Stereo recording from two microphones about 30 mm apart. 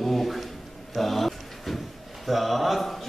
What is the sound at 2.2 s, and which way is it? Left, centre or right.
Speech, centre.